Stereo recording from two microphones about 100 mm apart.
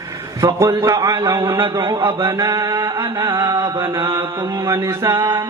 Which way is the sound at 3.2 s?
30° right (ahead or behind).